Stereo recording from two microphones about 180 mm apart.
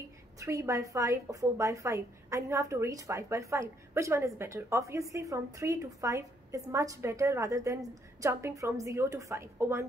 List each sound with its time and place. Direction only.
0.4 s a woman's voice: 20° right (ahead or behind)